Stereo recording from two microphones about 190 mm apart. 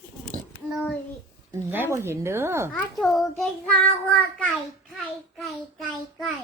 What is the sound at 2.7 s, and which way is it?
A child's voice, centre (ahead or behind).